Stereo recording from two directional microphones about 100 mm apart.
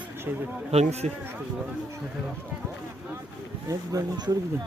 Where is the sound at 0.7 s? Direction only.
90° right.